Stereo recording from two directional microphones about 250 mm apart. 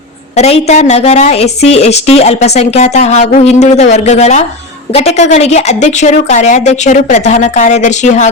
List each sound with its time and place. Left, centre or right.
0.3 s a woman's voice: left